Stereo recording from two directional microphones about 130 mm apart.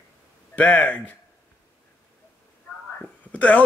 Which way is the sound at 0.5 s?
10° left (ahead or behind).